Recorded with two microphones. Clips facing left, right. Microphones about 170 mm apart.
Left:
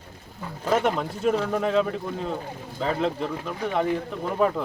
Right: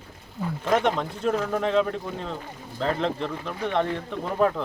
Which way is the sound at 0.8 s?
5° left (ahead or behind).